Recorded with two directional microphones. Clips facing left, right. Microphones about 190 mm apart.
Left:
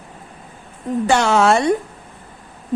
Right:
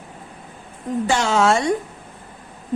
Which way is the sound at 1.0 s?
65° left (ahead or behind).